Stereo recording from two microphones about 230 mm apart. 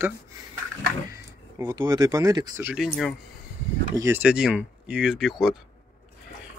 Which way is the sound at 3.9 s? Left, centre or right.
Centre.